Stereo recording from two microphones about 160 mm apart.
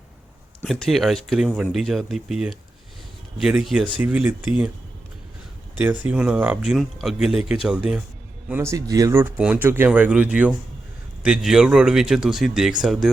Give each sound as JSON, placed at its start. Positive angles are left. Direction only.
{"t": 0.6, "sound": "speech", "side_deg": 0}
{"t": 5.7, "sound": "speech", "side_deg": -10}